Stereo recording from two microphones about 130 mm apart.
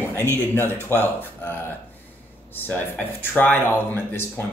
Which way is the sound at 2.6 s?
15° left (ahead or behind).